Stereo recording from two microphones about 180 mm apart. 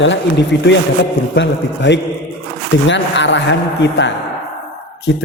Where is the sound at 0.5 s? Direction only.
75° left (ahead or behind).